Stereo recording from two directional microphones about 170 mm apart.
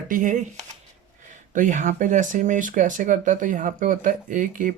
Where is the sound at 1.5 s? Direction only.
50° right (ahead or behind).